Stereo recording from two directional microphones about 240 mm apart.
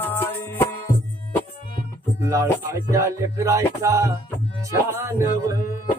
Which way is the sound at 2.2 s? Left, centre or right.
Centre.